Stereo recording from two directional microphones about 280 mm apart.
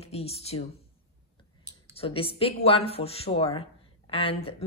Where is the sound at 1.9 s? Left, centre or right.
Centre.